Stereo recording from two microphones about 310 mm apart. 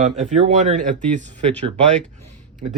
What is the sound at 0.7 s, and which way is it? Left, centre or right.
Speech, right.